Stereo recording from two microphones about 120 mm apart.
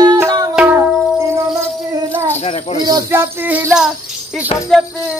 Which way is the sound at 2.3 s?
65° left (ahead or behind).